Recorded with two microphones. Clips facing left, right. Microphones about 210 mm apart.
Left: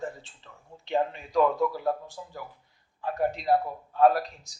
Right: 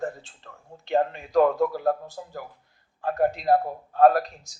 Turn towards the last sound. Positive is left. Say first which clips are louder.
# right 3 dB
turn(degrees=-50)  # may be behind; listen again after turning